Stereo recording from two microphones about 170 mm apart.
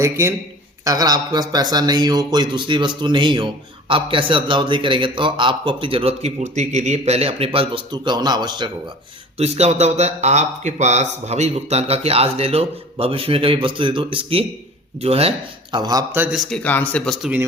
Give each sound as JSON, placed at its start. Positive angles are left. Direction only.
{"t": 0.0, "sound": "a man's voice", "side_deg": -15}
{"t": 9.4, "sound": "a man's voice", "side_deg": -40}
{"t": 15.7, "sound": "a man's voice", "side_deg": -20}
{"t": 16.2, "sound": "speech", "side_deg": 0}